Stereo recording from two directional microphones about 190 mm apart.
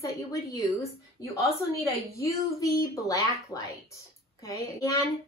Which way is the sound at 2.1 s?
15° left (ahead or behind).